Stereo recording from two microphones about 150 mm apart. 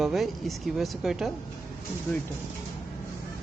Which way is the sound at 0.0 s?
Centre (ahead or behind).